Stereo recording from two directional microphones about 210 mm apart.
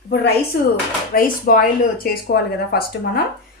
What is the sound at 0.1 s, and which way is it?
A woman's voice, 50° left (ahead or behind).